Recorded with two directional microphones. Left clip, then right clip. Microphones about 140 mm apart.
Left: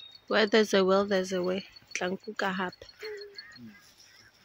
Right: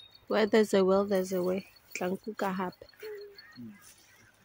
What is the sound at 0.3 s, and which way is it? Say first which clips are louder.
Speech: left 2 dB; 10° right (ahead or behind).